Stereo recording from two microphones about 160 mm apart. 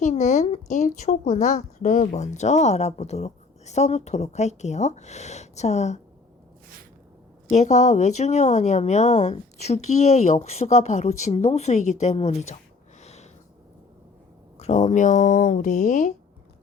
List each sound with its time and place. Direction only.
0.0 s speech: 45° left (ahead or behind)
7.5 s speech: 45° left (ahead or behind)
13.0 s a sound: 45° left (ahead or behind)
14.6 s speech: 45° left (ahead or behind)